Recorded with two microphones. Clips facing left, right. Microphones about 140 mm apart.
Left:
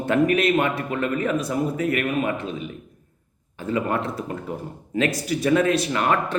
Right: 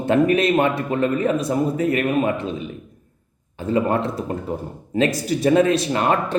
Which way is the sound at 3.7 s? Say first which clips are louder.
Right 4 dB; 30° right (ahead or behind).